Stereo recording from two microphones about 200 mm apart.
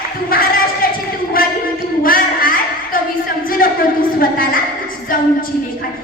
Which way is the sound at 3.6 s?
45° left (ahead or behind).